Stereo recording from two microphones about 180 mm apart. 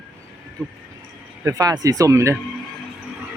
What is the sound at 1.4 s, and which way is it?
Speech, 20° right (ahead or behind).